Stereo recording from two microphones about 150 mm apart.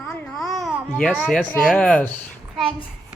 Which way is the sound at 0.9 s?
5° left (ahead or behind).